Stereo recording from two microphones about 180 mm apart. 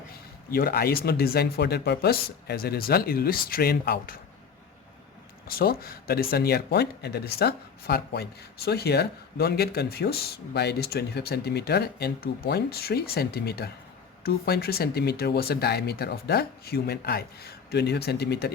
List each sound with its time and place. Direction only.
0.5 s speech: 60° left (ahead or behind)
5.5 s speech: 55° left (ahead or behind)